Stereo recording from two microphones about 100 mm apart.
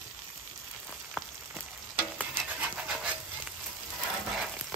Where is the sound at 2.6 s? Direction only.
10° right (ahead or behind).